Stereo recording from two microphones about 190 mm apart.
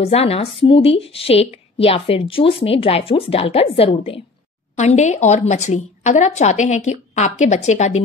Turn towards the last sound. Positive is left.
turn(degrees=35)  # may be behind; listen again after turning